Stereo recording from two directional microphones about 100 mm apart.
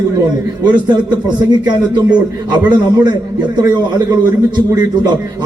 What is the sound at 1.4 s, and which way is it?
A man's voice, 45° right (ahead or behind).